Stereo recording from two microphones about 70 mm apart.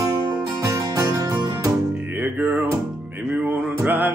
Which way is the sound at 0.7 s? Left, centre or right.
Right.